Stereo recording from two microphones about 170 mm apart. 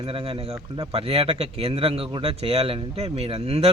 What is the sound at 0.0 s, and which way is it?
A man's voice, 30° right (ahead or behind).